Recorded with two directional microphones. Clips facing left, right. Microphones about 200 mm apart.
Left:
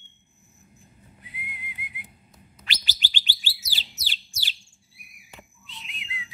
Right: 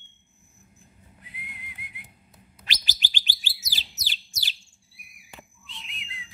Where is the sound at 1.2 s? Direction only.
Centre (ahead or behind).